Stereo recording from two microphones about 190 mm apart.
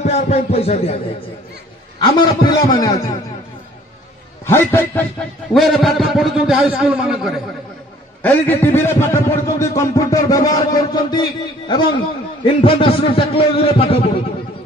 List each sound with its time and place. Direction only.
0.0 s a man's voice: 35° left (ahead or behind)
2.0 s speech: 25° left (ahead or behind)
4.5 s a man's voice: 10° left (ahead or behind)
5.5 s a man's voice: centre (ahead or behind)
8.2 s a man's voice: 10° left (ahead or behind); by 14.1 s 30° left (ahead or behind)